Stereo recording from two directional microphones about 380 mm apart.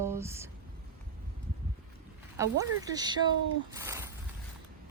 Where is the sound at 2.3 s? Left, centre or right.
Centre.